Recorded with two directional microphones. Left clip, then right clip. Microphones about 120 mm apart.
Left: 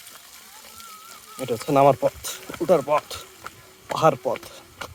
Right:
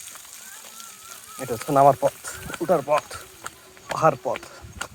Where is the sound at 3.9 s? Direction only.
45° left (ahead or behind).